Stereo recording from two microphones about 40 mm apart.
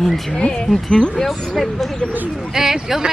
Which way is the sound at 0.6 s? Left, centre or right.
Centre.